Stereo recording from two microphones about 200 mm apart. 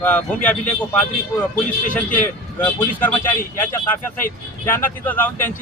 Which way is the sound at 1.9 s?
10° left (ahead or behind).